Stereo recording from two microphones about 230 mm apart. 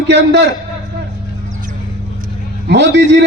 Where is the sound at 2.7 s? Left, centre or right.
Right.